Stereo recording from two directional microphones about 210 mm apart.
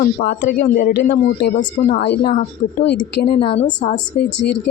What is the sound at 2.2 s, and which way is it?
Speech, 30° left (ahead or behind).